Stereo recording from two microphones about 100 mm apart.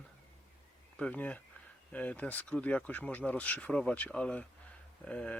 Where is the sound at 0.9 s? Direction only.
15° left (ahead or behind).